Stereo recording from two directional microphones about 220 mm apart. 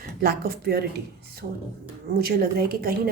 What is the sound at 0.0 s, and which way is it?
Speech, 45° right (ahead or behind).